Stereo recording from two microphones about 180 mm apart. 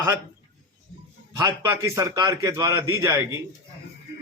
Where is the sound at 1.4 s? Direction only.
20° right (ahead or behind).